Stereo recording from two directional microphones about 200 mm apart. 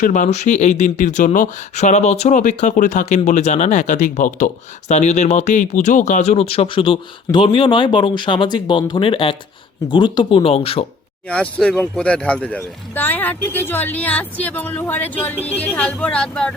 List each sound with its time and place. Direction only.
0.0 s speech: 40° left (ahead or behind)
11.3 s speech: 5° left (ahead or behind)